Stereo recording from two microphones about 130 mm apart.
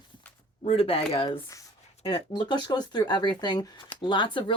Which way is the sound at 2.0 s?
35° left (ahead or behind).